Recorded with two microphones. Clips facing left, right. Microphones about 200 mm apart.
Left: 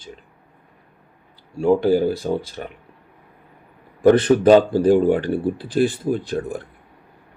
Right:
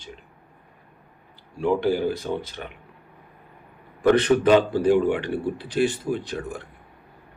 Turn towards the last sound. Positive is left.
turn(degrees=40)  # may be behind; listen again after turning